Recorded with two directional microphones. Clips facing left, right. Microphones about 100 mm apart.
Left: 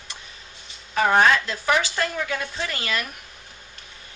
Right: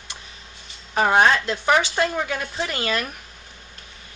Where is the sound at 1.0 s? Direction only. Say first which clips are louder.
Right 1 dB; 20° right (ahead or behind).